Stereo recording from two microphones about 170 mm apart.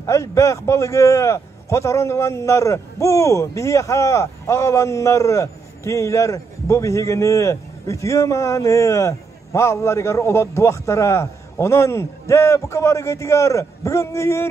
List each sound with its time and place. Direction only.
0.0 s a man's voice: 20° left (ahead or behind)